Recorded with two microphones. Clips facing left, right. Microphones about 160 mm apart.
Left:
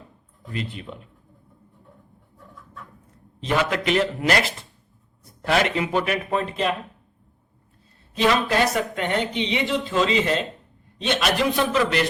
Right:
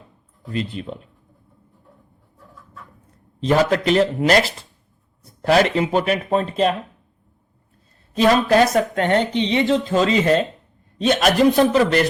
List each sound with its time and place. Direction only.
0.4 s speech: 35° right (ahead or behind)
3.4 s speech: 40° right (ahead or behind)
8.1 s speech: 45° right (ahead or behind)